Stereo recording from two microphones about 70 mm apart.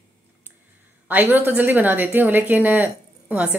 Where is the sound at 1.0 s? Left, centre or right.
Right.